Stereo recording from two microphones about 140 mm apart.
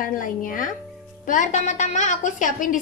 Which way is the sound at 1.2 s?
65° left (ahead or behind).